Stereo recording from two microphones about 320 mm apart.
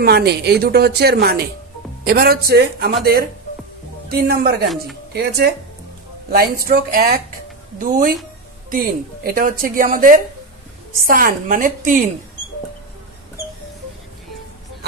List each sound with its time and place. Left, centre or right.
0.0 s speech: right
4.1 s speech: right